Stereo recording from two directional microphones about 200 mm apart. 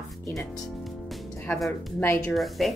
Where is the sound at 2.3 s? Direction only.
Centre (ahead or behind).